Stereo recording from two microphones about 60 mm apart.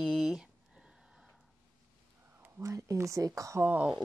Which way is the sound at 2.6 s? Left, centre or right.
Right.